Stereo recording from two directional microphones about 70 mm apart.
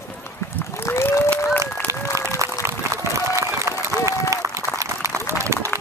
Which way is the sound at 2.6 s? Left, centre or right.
Right.